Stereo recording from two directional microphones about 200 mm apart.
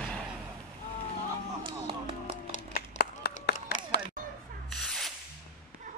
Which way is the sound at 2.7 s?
50° left (ahead or behind).